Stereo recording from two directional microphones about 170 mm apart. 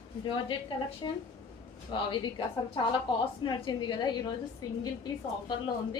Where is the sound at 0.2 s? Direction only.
30° left (ahead or behind).